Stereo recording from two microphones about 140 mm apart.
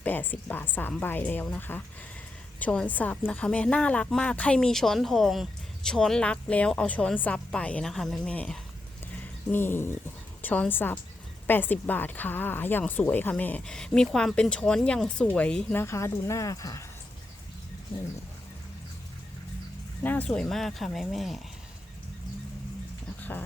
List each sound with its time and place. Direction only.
0.0 s a woman's voice: 10° left (ahead or behind)
15.8 s speech: 20° left (ahead or behind)
20.0 s speech: 10° left (ahead or behind)